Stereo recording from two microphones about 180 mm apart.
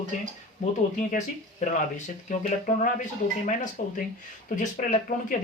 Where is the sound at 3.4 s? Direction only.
45° left (ahead or behind).